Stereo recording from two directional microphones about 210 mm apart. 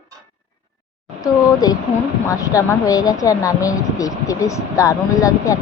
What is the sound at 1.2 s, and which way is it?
Speech, 15° left (ahead or behind).